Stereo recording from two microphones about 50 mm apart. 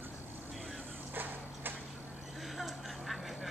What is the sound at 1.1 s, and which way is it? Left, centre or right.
Horse, right.